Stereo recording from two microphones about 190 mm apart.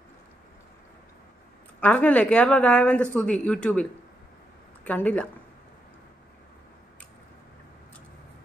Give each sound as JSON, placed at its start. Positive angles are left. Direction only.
{"t": 1.8, "sound": "a woman's voice", "side_deg": 5}
{"t": 4.8, "sound": "a woman's voice", "side_deg": 10}